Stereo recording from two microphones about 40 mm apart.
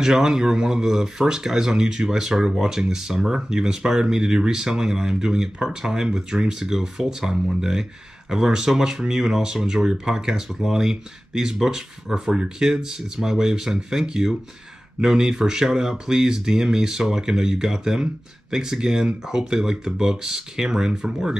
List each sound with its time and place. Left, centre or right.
0.0 s speech: centre